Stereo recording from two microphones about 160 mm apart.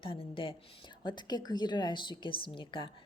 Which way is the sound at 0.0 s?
35° left (ahead or behind).